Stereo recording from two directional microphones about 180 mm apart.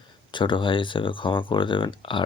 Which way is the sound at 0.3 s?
25° left (ahead or behind).